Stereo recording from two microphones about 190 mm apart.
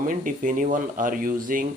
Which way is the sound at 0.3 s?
45° right (ahead or behind).